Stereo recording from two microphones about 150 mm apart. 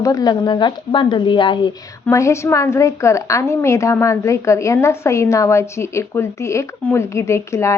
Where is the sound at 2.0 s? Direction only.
20° left (ahead or behind).